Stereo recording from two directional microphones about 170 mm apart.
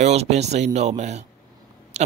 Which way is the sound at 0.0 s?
40° right (ahead or behind).